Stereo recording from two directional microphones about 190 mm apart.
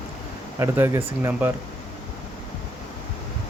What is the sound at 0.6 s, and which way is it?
Speech, 15° right (ahead or behind).